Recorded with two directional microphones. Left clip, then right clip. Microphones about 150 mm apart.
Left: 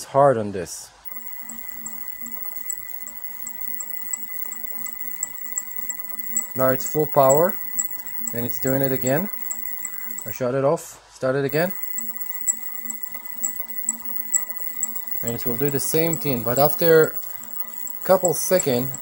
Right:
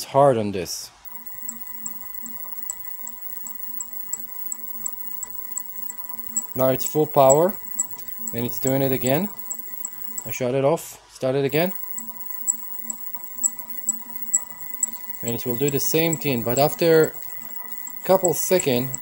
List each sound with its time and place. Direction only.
0.0 s speech: 30° right (ahead or behind)
6.5 s speech: 20° right (ahead or behind)
10.2 s speech: 25° right (ahead or behind)
15.2 s speech: 15° right (ahead or behind)